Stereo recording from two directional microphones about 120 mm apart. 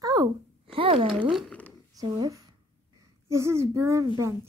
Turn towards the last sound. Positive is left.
turn(degrees=-25)  # may be behind; listen again after turning